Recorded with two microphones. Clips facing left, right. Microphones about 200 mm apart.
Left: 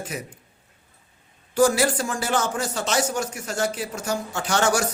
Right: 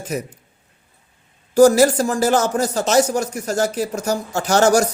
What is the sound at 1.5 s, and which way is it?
Speech, 40° right (ahead or behind).